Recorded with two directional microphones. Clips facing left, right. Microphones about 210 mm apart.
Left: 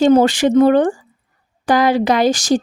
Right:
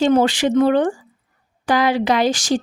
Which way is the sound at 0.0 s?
40° left (ahead or behind).